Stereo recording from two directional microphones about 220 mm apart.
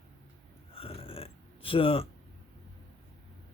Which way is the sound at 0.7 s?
25° left (ahead or behind).